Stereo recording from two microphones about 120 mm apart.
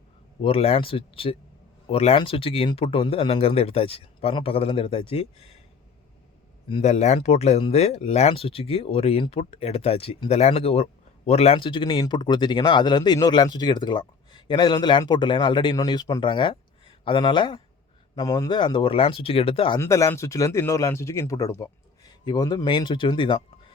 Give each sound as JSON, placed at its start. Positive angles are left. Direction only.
{"t": 0.4, "sound": "speech", "side_deg": 55}
{"t": 6.8, "sound": "speech", "side_deg": 65}
{"t": 18.1, "sound": "speech", "side_deg": 30}
{"t": 19.8, "sound": "speech", "side_deg": 25}